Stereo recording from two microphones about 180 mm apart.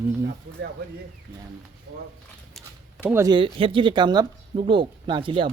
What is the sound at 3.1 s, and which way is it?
Speech, 15° right (ahead or behind).